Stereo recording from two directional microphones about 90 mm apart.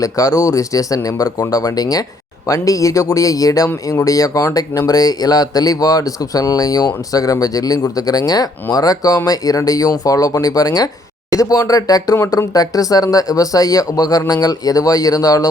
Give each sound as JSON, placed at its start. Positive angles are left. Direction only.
{"t": 0.0, "sound": "speech", "side_deg": 40}
{"t": 12.1, "sound": "speech", "side_deg": 30}